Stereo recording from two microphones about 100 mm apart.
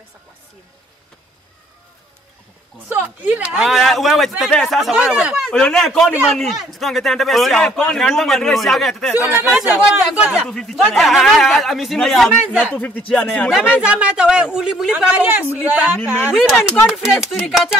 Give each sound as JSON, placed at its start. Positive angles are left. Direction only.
{"t": 3.0, "sound": "a man's voice", "side_deg": -15}
{"t": 5.5, "sound": "a man's voice", "side_deg": 5}
{"t": 10.4, "sound": "a man's voice", "side_deg": 5}
{"t": 12.7, "sound": "speech", "side_deg": 15}
{"t": 13.7, "sound": "speech", "side_deg": -10}
{"t": 16.8, "sound": "a man's voice", "side_deg": -5}